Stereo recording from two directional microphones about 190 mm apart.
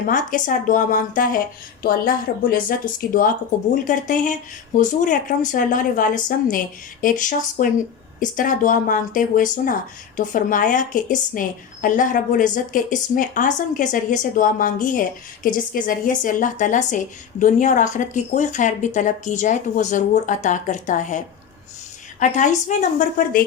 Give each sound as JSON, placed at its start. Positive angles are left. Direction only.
{"t": 0.0, "sound": "a woman's voice", "side_deg": 45}
{"t": 22.2, "sound": "speech", "side_deg": 40}